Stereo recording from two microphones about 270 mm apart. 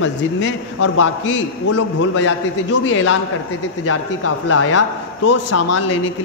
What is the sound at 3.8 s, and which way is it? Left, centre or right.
A man's voice, left.